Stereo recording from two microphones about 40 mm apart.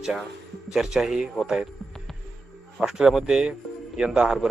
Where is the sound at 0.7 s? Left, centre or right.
Centre.